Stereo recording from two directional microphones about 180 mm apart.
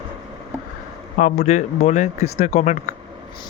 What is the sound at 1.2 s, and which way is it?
Speech, 40° left (ahead or behind).